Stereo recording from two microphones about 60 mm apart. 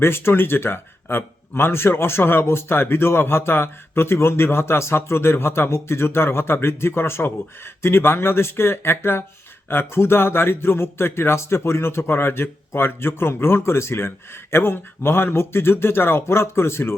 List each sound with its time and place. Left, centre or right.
0.0 s a man's voice: left